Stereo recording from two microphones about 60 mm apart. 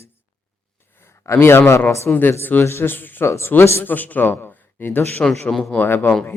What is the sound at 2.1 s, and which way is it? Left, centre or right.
Mantra, left.